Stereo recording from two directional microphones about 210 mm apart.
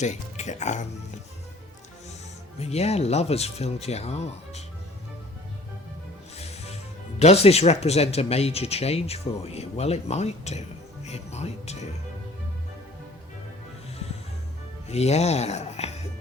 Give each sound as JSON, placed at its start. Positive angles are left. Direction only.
{"t": 0.0, "sound": "speech", "side_deg": 35}
{"t": 2.6, "sound": "speech", "side_deg": 30}
{"t": 7.2, "sound": "speech", "side_deg": 30}
{"t": 14.8, "sound": "speech", "side_deg": 30}